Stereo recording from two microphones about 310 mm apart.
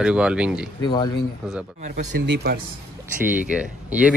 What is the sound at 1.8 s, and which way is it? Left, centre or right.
Speech, right.